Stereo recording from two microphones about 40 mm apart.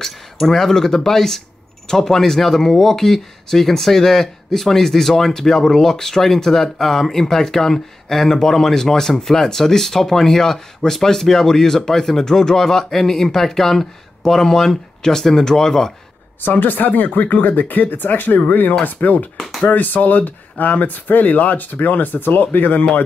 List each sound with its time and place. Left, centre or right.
0.0 s speech: centre
16.3 s speech: left
19.3 s speech: centre
19.7 s speech: left